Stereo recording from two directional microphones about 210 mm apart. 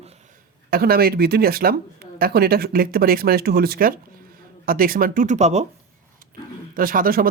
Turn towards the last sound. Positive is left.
turn(degrees=-45)  # may be behind; listen again after turning